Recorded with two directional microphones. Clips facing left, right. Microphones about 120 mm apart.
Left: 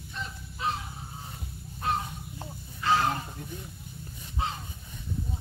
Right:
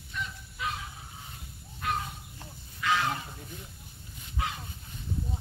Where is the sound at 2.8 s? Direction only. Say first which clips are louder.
Left 3 dB; 35° left (ahead or behind).